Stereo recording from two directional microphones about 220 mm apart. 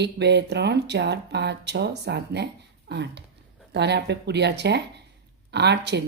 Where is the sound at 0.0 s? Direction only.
50° right (ahead or behind).